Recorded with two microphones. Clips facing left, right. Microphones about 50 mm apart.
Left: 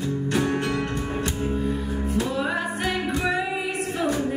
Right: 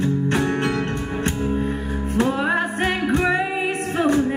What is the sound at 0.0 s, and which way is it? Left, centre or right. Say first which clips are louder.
Music: right 4 dB; right.